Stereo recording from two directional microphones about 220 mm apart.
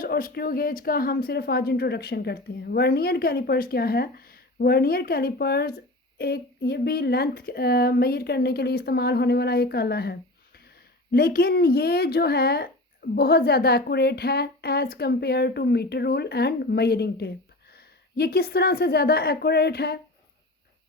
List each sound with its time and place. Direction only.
0.0 s a woman's voice: 40° left (ahead or behind)